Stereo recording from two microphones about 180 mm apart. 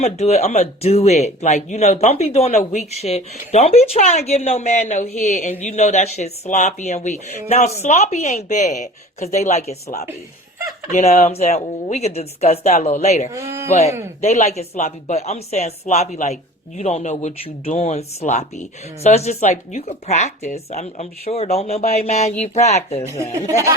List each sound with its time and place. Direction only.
0.0 s speech: 35° left (ahead or behind)
10.9 s speech: 35° left (ahead or behind)
13.3 s speech: 15° right (ahead or behind)
13.7 s speech: 35° left (ahead or behind)